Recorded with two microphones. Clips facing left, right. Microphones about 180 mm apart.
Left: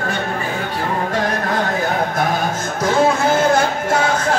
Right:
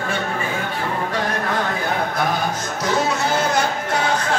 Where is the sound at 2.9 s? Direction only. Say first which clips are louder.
Left 6 dB; 55° left (ahead or behind).